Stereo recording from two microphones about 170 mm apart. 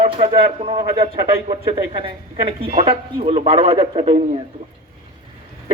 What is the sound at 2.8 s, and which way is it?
Speech, 35° right (ahead or behind).